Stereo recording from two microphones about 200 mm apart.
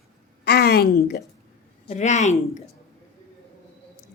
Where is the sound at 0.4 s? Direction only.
55° left (ahead or behind).